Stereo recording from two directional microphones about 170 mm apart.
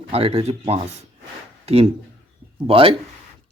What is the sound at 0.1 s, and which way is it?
Speech, 35° right (ahead or behind).